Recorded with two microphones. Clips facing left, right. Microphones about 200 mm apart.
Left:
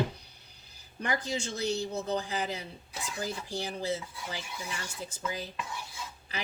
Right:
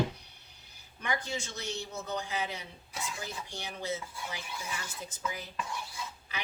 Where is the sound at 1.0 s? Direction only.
35° left (ahead or behind).